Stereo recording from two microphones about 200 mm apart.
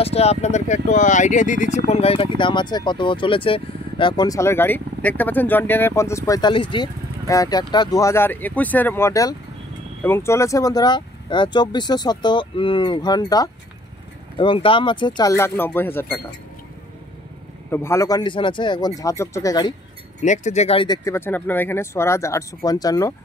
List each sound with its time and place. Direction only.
0.0 s speech: 30° left (ahead or behind); by 16.2 s 10° left (ahead or behind)
17.6 s speech: 10° left (ahead or behind)
20.2 s speech: 35° left (ahead or behind); by 23.1 s 15° left (ahead or behind)